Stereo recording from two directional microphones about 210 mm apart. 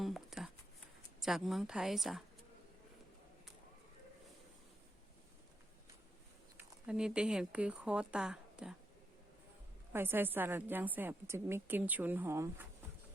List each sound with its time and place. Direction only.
0.0 s a sound: centre (ahead or behind)
1.2 s speech: centre (ahead or behind)
6.6 s speech: 5° right (ahead or behind)
9.9 s a woman's voice: 10° right (ahead or behind)